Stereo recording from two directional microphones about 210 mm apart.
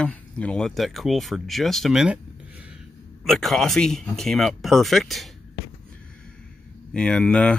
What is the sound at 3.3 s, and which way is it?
Speech, centre (ahead or behind).